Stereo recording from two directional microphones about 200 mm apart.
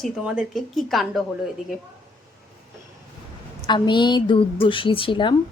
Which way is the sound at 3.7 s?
25° left (ahead or behind).